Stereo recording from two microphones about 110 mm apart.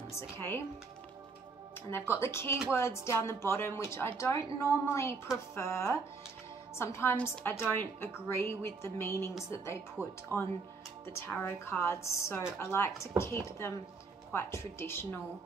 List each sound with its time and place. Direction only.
0.1 s a woman's voice: 20° left (ahead or behind)
1.9 s a woman's voice: 20° left (ahead or behind)
10.0 s speech: 15° right (ahead or behind)
11.1 s a woman's voice: 25° left (ahead or behind)